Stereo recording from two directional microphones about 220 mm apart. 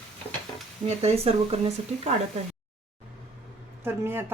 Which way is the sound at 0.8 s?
25° right (ahead or behind).